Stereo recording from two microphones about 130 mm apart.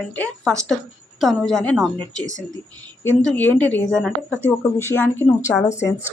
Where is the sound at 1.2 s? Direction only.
Centre (ahead or behind).